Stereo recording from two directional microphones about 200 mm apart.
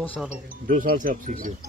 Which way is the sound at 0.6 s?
45° right (ahead or behind).